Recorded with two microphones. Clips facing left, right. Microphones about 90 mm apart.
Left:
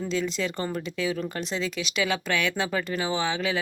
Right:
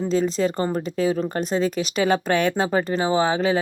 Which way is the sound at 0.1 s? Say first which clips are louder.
Right 8 dB; 40° right (ahead or behind).